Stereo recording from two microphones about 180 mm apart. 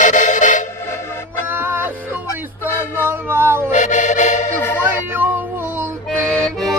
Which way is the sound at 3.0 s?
10° right (ahead or behind).